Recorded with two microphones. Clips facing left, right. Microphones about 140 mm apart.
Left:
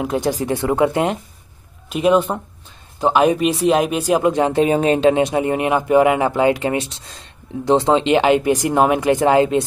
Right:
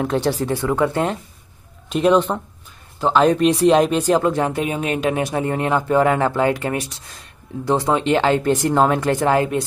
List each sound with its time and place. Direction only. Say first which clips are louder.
0.0 s speech: even; 10° left (ahead or behind)
1.9 s speech: even; 5° left (ahead or behind)